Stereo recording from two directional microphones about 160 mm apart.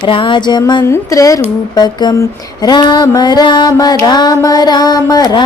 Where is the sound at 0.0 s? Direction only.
30° left (ahead or behind).